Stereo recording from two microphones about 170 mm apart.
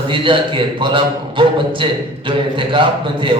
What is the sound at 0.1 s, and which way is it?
A man's voice, 30° right (ahead or behind).